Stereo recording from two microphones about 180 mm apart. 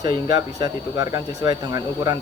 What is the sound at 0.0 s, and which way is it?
Speech, 20° right (ahead or behind).